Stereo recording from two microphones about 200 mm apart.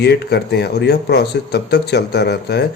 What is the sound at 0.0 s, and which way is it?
Speech, 55° left (ahead or behind).